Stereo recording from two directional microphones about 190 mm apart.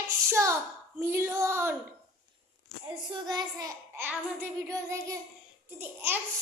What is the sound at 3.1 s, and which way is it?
Child singing, 20° right (ahead or behind).